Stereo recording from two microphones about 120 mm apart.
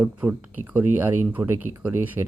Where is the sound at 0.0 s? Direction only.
15° right (ahead or behind).